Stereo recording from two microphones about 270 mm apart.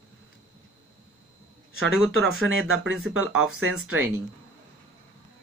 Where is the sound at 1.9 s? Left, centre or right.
Centre.